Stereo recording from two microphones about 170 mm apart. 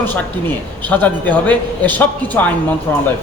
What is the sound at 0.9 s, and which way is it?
A man's voice, 10° left (ahead or behind).